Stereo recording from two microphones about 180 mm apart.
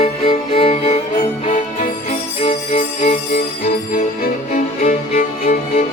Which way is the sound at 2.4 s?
35° left (ahead or behind).